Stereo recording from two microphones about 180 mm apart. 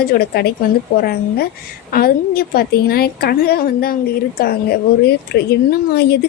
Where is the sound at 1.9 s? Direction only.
55° left (ahead or behind).